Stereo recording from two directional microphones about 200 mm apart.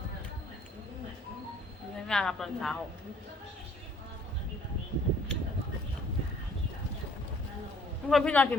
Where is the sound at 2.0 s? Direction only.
5° left (ahead or behind).